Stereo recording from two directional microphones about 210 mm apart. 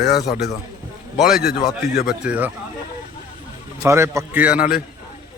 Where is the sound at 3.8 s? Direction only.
15° right (ahead or behind).